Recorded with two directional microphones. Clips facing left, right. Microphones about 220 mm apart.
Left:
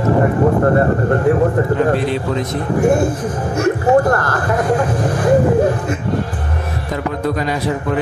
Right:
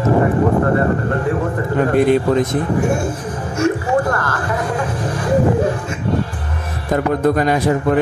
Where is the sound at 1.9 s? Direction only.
50° right (ahead or behind).